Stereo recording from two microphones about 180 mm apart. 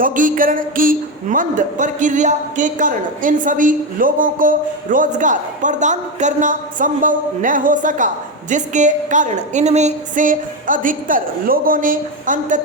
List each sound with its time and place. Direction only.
0.0 s speech: 50° right (ahead or behind)